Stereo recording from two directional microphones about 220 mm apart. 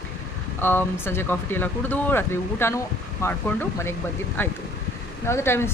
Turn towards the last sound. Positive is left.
turn(degrees=10)  # may be behind; listen again after turning